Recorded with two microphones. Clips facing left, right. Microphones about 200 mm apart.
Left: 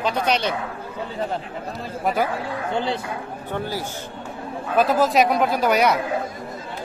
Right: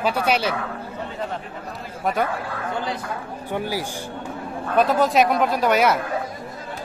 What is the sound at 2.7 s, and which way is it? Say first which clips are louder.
Speech: left 4 dB; 30° left (ahead or behind).